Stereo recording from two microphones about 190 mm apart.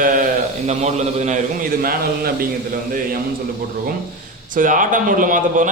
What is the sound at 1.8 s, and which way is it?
Speech, 50° right (ahead or behind).